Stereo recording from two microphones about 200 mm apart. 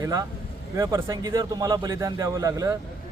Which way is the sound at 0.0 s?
15° right (ahead or behind).